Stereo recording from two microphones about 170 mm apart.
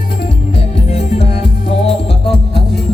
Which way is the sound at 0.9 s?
40° left (ahead or behind).